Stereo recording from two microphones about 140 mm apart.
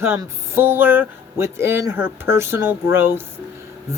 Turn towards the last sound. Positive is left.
turn(degrees=-15)  # may be behind; listen again after turning